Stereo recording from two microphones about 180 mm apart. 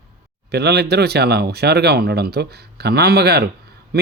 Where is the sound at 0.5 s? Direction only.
65° right (ahead or behind).